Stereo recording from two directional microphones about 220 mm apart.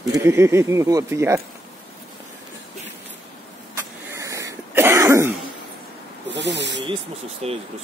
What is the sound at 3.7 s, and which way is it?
Cough, 15° right (ahead or behind).